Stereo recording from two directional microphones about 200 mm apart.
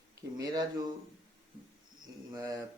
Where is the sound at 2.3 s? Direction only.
15° right (ahead or behind).